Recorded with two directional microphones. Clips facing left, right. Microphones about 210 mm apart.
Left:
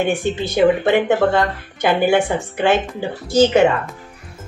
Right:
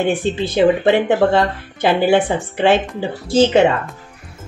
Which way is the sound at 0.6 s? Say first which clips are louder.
Right 1 dB; 25° right (ahead or behind).